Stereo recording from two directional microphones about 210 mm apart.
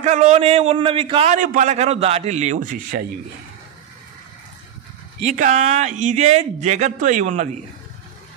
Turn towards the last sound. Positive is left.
turn(degrees=-35)  # may be behind; listen again after turning